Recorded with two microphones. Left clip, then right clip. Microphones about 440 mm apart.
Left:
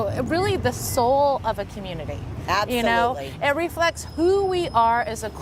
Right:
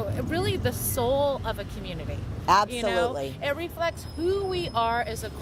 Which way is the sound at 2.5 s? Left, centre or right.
Right.